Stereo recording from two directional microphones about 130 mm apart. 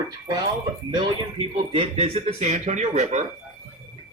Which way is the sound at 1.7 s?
50° right (ahead or behind).